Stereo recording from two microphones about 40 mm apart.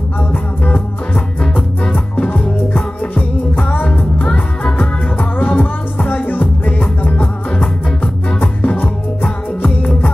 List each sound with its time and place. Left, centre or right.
0.3 s music: left
3.8 s music: left
4.7 s music: left
8.4 s music: left